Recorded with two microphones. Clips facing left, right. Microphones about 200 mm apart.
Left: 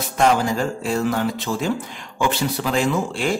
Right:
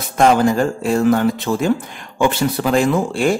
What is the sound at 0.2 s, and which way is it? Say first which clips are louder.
Speech: right 5 dB; 55° right (ahead or behind).